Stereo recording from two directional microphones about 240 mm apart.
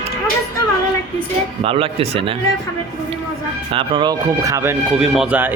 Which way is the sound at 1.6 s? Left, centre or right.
Right.